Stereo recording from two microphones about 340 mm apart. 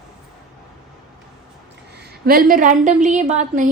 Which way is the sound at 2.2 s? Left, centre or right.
Right.